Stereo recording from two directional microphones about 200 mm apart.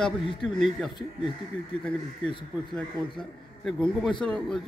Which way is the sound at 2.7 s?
5° left (ahead or behind).